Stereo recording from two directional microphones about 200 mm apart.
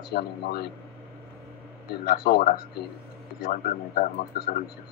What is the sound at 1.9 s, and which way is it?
A man's voice, 50° left (ahead or behind).